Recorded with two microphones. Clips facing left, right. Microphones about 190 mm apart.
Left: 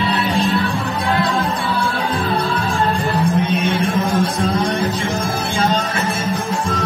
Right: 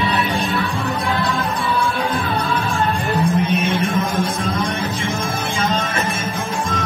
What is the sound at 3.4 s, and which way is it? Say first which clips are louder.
Music: left 1 dB; 30° left (ahead or behind).